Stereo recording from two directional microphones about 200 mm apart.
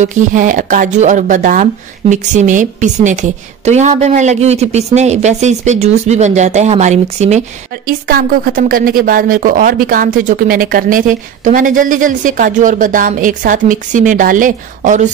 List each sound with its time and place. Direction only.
0.0 s speech: 40° right (ahead or behind)